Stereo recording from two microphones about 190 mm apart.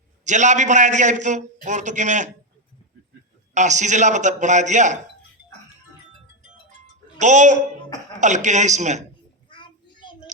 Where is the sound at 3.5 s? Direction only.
40° right (ahead or behind).